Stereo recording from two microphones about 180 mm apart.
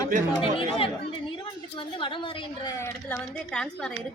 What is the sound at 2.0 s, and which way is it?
Speech, 25° left (ahead or behind).